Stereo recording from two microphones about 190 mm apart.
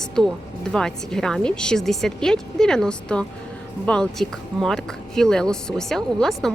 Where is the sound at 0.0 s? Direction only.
Centre (ahead or behind).